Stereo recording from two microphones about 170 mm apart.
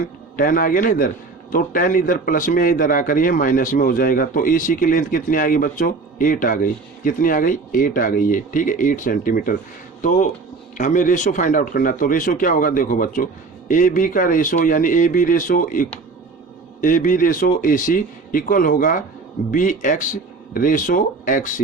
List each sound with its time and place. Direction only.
0.3 s a man's voice: 55° left (ahead or behind)
10.8 s a man's voice: 50° left (ahead or behind)